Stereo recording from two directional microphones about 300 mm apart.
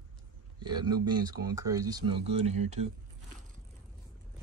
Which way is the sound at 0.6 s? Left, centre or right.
Centre.